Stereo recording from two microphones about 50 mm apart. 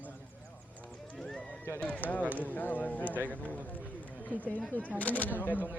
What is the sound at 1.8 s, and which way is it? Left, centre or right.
Speech, left.